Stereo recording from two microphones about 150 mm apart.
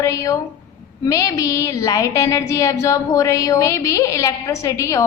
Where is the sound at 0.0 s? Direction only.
20° left (ahead or behind).